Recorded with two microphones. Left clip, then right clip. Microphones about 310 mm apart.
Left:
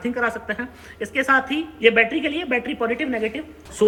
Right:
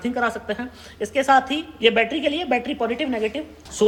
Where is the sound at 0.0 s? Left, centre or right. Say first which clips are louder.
Even; centre.